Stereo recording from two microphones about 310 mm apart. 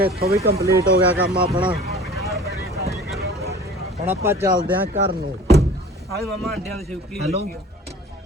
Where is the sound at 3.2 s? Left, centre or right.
Right.